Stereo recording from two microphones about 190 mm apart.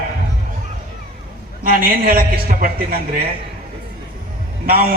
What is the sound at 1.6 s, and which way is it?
A woman's voice, 50° right (ahead or behind).